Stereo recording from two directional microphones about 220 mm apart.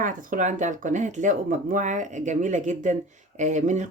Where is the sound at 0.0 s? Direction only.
35° right (ahead or behind).